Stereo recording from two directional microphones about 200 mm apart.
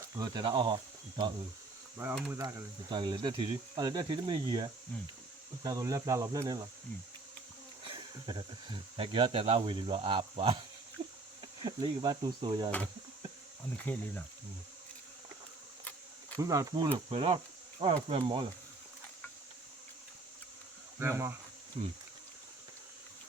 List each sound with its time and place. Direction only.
0.0 s speech: 20° right (ahead or behind)
2.3 s speech: 15° right (ahead or behind)
7.9 s speech: 25° right (ahead or behind)
11.0 s insect: 30° right (ahead or behind)
11.6 s speech: 20° right (ahead or behind)
13.7 s speech: 10° left (ahead or behind)
16.4 s speech: 15° right (ahead or behind)
17.1 s insect: 25° right (ahead or behind)
21.0 s speech: 10° right (ahead or behind)
21.8 s speech: 25° right (ahead or behind)